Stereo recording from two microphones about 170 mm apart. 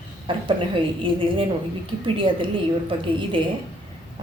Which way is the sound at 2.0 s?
30° right (ahead or behind).